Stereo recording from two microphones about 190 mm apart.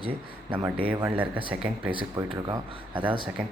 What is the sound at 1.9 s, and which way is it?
Speech, 25° right (ahead or behind).